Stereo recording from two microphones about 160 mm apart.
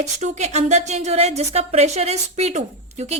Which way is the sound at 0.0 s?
45° right (ahead or behind).